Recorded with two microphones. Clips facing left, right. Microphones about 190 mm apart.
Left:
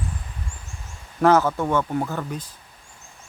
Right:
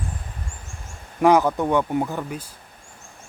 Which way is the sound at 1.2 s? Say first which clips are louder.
Right 1 dB; 15° right (ahead or behind).